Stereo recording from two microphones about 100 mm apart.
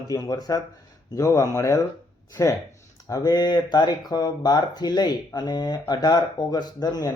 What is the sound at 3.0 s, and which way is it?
Speech, 40° left (ahead or behind).